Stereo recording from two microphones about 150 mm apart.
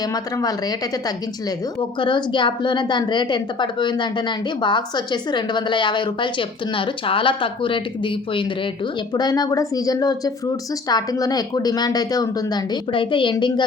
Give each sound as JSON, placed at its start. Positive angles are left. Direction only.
{"t": 0.0, "sound": "a woman's voice", "side_deg": 25}